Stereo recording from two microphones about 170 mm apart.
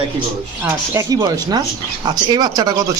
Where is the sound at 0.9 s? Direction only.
20° right (ahead or behind).